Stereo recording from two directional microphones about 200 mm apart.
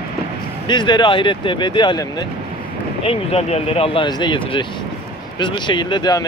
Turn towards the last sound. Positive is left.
turn(degrees=20)  # may be behind; listen again after turning